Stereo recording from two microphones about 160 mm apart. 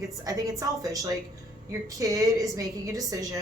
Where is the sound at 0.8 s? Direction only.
20° right (ahead or behind).